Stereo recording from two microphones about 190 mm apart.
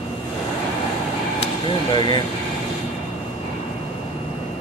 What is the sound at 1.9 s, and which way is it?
Speech, 25° left (ahead or behind).